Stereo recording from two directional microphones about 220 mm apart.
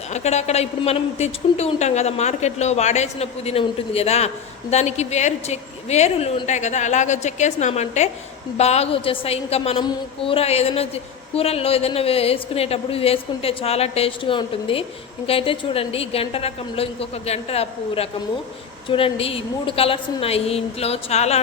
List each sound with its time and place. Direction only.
0.1 s a woman's voice: 30° left (ahead or behind)